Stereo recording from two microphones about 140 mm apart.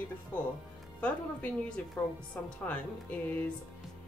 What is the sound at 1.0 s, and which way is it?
Speech, 10° left (ahead or behind).